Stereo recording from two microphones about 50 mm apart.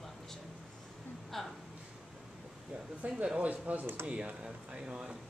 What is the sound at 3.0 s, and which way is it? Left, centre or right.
Speech, right.